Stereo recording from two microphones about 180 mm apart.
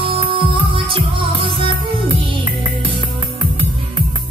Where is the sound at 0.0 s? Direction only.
30° right (ahead or behind).